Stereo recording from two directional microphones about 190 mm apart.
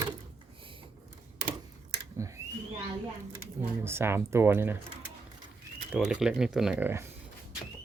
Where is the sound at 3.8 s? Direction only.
15° right (ahead or behind).